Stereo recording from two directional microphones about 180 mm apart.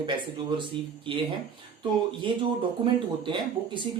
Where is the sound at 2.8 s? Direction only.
25° right (ahead or behind).